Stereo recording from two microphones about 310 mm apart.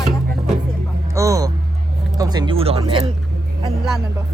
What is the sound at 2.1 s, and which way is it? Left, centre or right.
Speech, centre.